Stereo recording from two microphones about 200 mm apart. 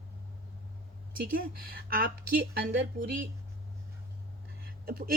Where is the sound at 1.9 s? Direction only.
45° right (ahead or behind).